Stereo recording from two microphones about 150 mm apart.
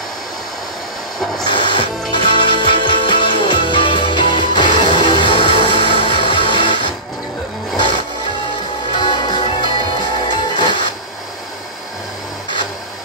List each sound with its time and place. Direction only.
1.5 s music: 35° left (ahead or behind)
8.9 s music: 30° left (ahead or behind)